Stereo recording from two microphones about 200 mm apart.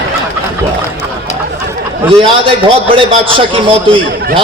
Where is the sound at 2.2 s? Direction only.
25° right (ahead or behind).